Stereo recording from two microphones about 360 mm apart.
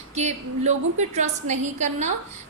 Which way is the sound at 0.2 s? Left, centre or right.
Centre.